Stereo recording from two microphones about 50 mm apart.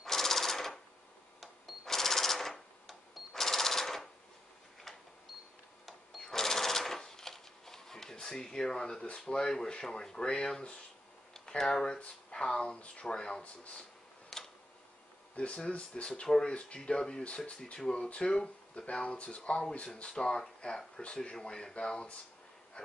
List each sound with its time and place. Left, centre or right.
0.0 s a sound: centre
1.9 s a sound: centre
5.9 s sewing machine: centre
9.3 s speech: centre
14.3 s tick-tock: centre
15.3 s speech: left